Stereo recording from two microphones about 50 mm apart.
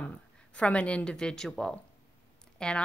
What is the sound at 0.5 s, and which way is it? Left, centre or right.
A woman's voice, left.